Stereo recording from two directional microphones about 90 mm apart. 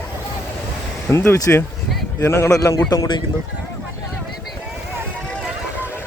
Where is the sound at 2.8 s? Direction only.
45° left (ahead or behind).